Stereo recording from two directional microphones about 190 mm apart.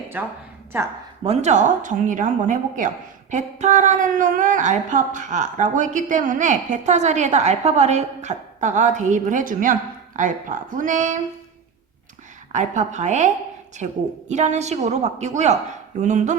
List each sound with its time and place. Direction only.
0.1 s a woman's voice: 10° right (ahead or behind)
1.2 s speech: 35° right (ahead or behind)
12.5 s speech: 40° right (ahead or behind)